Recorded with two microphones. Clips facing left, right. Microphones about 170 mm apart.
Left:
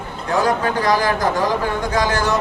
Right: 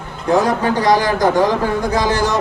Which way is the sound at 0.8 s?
35° right (ahead or behind).